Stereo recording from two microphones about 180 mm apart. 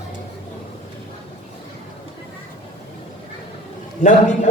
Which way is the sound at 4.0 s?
45° left (ahead or behind).